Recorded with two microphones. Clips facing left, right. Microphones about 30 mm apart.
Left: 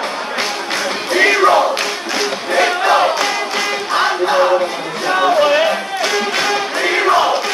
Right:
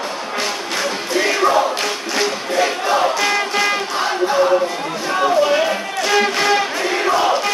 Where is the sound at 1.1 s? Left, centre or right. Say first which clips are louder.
Left 5 dB; left.